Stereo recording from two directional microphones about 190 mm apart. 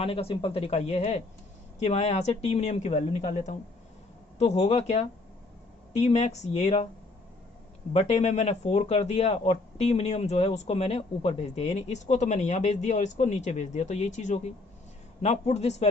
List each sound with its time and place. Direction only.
0.0 s speech: 30° left (ahead or behind)
7.9 s speech: 35° left (ahead or behind)